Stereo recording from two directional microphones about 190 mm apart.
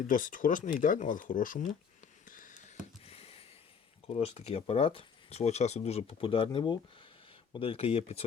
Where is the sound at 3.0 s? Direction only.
30° left (ahead or behind).